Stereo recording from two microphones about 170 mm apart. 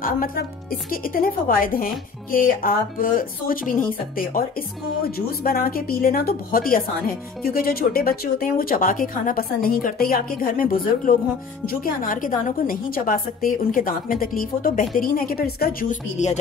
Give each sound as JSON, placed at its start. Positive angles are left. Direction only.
{"t": 0.0, "sound": "speech", "side_deg": 60}